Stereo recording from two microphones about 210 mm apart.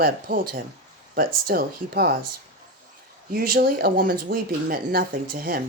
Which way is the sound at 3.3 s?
45° right (ahead or behind).